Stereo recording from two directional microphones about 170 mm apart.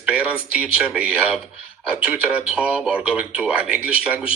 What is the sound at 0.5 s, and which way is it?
Speech, 5° right (ahead or behind).